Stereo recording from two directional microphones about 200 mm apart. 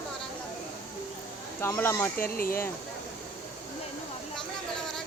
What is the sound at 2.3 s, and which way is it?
Speech, 45° left (ahead or behind).